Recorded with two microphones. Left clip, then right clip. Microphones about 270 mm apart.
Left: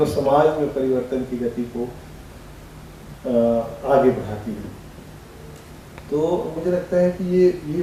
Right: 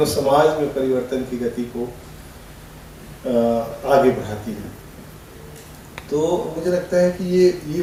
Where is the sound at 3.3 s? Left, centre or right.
Left.